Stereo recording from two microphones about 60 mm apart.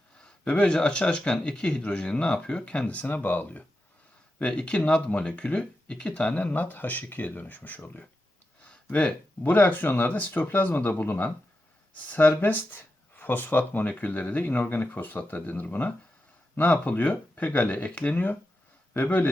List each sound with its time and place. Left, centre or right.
0.2 s speech: left
8.6 s a sound: left
9.4 s speech: left